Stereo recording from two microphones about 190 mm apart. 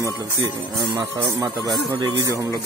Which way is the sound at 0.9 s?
20° right (ahead or behind).